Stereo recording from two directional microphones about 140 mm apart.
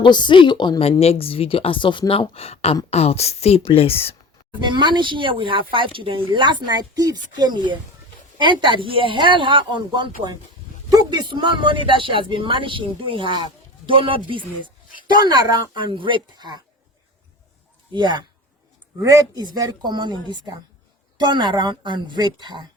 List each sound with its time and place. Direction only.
0.0 s a woman's voice: 35° left (ahead or behind)
4.6 s speech: 35° right (ahead or behind)
17.9 s speech: 35° right (ahead or behind)
18.9 s speech: 25° right (ahead or behind)